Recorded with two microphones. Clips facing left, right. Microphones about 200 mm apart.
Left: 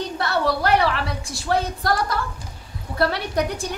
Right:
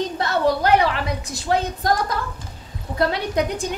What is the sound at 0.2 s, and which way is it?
A woman's voice, 20° right (ahead or behind).